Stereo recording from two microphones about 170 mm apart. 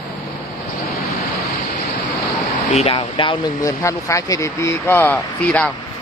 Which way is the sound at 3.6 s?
20° left (ahead or behind).